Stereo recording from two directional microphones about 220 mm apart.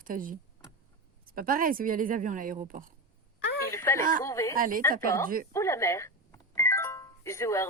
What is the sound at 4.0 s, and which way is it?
Speech, 40° right (ahead or behind).